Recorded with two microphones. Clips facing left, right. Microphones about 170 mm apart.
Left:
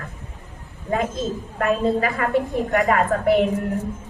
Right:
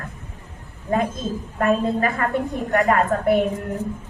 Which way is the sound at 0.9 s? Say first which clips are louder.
Right 1 dB; 45° right (ahead or behind).